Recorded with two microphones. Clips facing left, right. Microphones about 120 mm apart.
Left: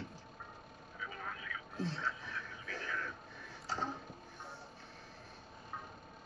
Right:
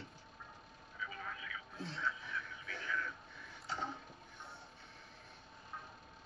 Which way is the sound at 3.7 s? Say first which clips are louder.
Left 3 dB; 35° left (ahead or behind).